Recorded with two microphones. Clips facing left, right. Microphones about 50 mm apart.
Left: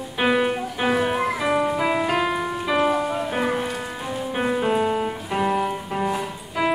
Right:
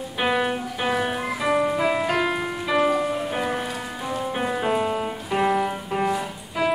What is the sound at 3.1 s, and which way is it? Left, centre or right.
Music, centre.